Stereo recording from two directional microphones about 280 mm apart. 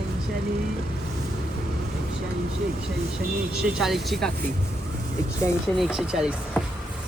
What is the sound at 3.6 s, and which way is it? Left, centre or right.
Speech, centre.